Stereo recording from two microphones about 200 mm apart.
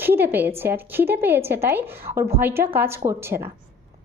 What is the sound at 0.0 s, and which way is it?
A woman's voice, 10° right (ahead or behind).